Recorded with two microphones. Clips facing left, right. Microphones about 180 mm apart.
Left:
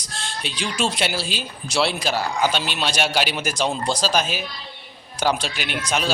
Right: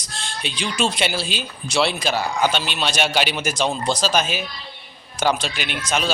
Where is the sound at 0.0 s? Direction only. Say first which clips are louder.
Right 1 dB; 5° left (ahead or behind).